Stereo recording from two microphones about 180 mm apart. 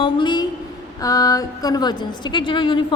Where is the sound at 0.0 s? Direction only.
25° left (ahead or behind).